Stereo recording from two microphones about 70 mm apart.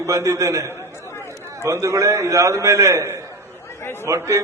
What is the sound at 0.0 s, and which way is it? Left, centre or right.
A man's voice, right.